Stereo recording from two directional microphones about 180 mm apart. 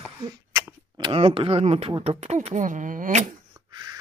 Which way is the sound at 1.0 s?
30° right (ahead or behind).